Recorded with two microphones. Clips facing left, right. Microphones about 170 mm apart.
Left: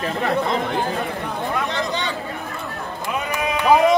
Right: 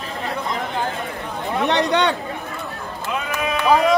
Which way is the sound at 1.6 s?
70° right (ahead or behind).